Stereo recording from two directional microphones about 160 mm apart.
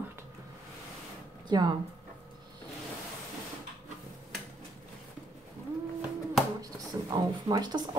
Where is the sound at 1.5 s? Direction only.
25° right (ahead or behind).